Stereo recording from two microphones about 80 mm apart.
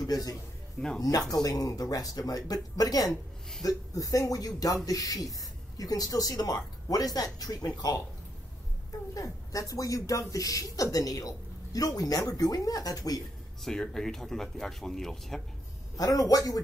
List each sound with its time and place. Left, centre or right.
0.0 s a man's voice: left
0.7 s speech: centre
1.3 s speech: left
3.1 s a man's voice: centre
3.6 s speech: left
9.1 s speech: left
13.6 s speech: centre
16.0 s speech: left